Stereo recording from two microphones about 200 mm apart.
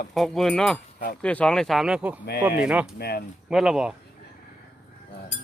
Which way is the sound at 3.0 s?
55° left (ahead or behind).